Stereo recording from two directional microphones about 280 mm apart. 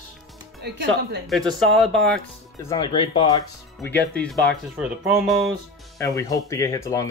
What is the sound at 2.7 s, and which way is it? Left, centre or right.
Speech, centre.